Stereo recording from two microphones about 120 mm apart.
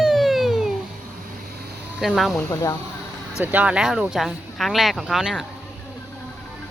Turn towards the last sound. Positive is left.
turn(degrees=0)  # may be behind; listen again after turning